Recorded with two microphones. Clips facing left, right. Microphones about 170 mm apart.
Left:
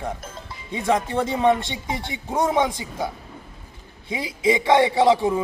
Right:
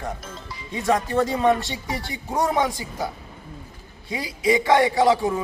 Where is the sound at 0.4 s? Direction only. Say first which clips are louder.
Even; 20° left (ahead or behind).